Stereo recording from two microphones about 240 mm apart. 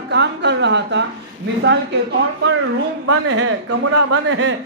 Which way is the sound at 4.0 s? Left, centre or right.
Right.